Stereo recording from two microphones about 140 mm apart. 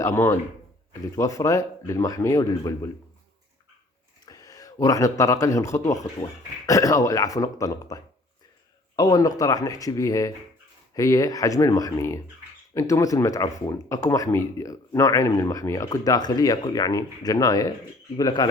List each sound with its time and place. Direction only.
0.0 s speech: 20° left (ahead or behind)
4.3 s speech: 25° left (ahead or behind)